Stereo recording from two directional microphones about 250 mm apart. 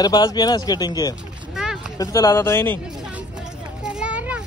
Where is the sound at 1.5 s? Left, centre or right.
Centre.